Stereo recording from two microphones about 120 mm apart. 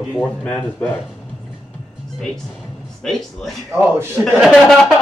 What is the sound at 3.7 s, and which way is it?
Speech, 20° right (ahead or behind).